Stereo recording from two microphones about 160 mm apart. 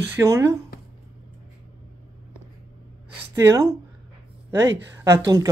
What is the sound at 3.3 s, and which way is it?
Speech, 20° right (ahead or behind).